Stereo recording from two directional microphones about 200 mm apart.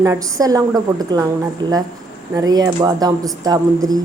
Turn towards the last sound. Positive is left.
turn(degrees=-20)  # may be behind; listen again after turning